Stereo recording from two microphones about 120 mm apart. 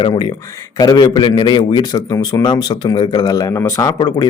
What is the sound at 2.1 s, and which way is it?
Speech, 25° left (ahead or behind).